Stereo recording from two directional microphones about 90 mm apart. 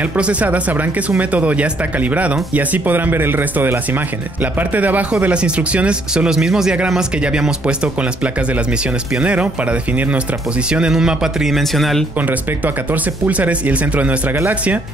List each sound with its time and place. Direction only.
0.0 s speech: 15° right (ahead or behind); by 12.1 s centre (ahead or behind)
12.2 s speech: 20° right (ahead or behind)